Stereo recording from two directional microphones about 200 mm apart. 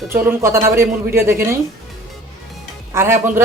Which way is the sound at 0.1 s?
10° right (ahead or behind).